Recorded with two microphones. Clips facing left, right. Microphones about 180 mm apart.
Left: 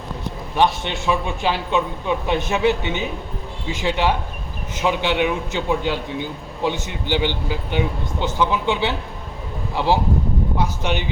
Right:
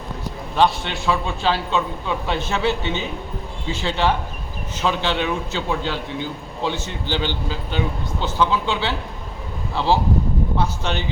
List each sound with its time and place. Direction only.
0.5 s a man's voice: 15° left (ahead or behind)